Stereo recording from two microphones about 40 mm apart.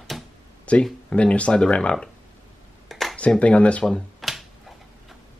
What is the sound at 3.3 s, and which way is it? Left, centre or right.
Speech, left.